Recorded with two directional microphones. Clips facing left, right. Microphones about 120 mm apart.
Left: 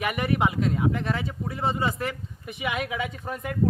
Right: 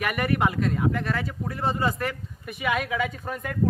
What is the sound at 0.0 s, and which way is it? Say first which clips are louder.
Speech: even; 25° left (ahead or behind).